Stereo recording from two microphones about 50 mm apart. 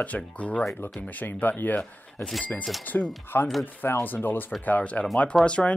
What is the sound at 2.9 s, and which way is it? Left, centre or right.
Speech, left.